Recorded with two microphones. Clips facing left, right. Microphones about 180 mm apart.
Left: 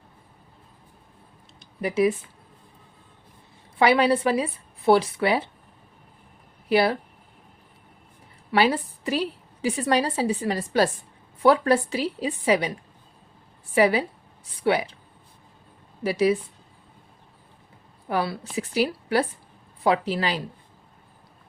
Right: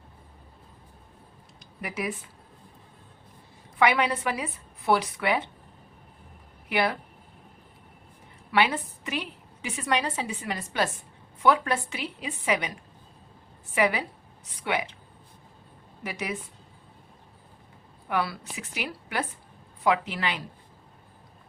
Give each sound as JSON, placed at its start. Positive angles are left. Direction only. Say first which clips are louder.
{"t": 1.5, "sound": "a sound", "louder": "left 11 dB", "side_deg": 30}
{"t": 3.8, "sound": "a woman's voice", "louder": "left 5 dB", "side_deg": 30}
{"t": 6.7, "sound": "a woman's voice", "louder": "left 6 dB", "side_deg": 30}
{"t": 8.5, "sound": "a woman's voice", "louder": "left 4 dB", "side_deg": 35}
{"t": 13.7, "sound": "a woman's voice", "louder": "left 5 dB", "side_deg": 30}
{"t": 16.0, "sound": "a woman's voice", "louder": "left 12 dB", "side_deg": 30}
{"t": 18.1, "sound": "a woman's voice", "louder": "left 3 dB", "side_deg": 30}